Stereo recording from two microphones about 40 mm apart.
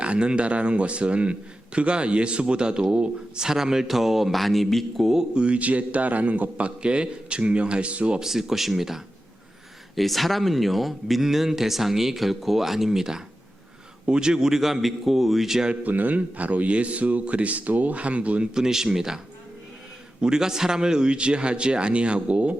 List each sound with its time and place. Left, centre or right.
0.0 s a man's voice: right; by 5.1 s centre
5.3 s a man's voice: right
5.5 s a man's voice: right
8.2 s a man's voice: centre
15.8 s a man's voice: right
18.5 s a man's voice: centre
20.2 s a man's voice: centre; by 22.5 s right